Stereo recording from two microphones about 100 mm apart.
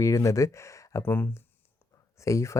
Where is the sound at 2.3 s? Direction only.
30° left (ahead or behind).